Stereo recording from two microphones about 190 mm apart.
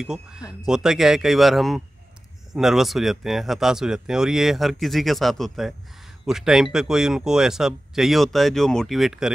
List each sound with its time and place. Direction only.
0.0 s speech: 5° right (ahead or behind)
0.4 s speech: 20° left (ahead or behind)
0.7 s speech: centre (ahead or behind)